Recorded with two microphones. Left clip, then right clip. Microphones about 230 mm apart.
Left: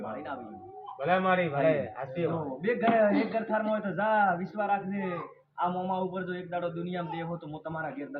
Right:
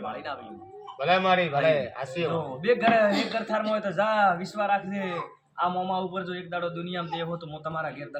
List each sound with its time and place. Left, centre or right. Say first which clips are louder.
0.9 s a man's voice: right 4 dB; centre